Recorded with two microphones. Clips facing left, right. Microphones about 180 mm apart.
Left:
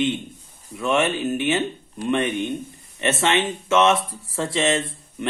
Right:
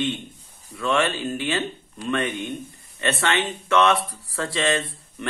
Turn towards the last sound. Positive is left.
turn(degrees=20)  # may be behind; listen again after turning